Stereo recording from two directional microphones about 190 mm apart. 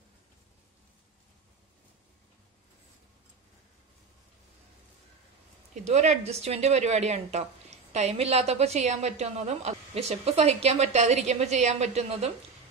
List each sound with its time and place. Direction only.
5.9 s speech: 35° right (ahead or behind)